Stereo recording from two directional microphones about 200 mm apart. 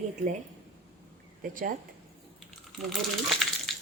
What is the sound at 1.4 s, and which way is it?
Speech, 40° right (ahead or behind).